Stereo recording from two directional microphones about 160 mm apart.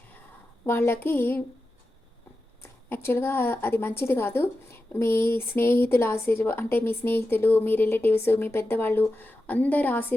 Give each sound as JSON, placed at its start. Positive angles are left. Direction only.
{"t": 0.6, "sound": "a woman's voice", "side_deg": 15}
{"t": 2.9, "sound": "a woman's voice", "side_deg": 15}